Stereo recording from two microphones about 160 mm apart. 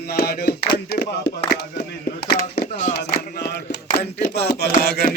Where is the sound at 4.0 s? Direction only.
90° left.